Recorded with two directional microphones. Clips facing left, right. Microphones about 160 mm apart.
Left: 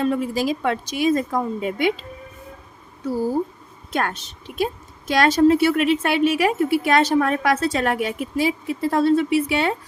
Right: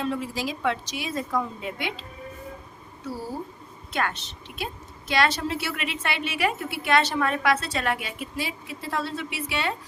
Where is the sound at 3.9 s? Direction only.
50° left (ahead or behind).